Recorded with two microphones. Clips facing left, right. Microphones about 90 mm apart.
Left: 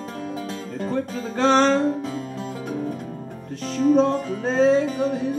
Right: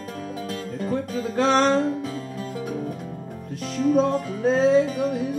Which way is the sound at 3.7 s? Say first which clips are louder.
Left 2 dB; 30° left (ahead or behind).